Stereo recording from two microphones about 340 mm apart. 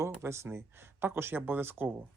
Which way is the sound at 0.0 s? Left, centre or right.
Centre.